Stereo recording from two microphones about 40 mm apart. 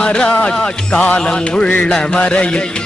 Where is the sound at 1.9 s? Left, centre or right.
Left.